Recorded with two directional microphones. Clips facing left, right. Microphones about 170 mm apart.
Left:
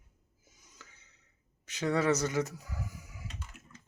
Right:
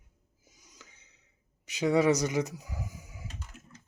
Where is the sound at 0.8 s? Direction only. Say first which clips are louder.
Even; 15° right (ahead or behind).